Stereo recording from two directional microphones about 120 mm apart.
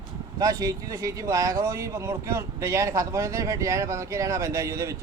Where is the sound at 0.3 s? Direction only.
30° right (ahead or behind).